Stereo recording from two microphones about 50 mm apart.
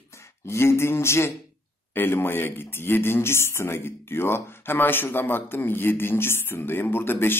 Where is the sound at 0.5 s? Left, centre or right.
Left.